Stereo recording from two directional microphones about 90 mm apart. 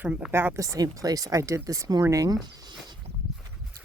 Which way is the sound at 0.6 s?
40° right (ahead or behind).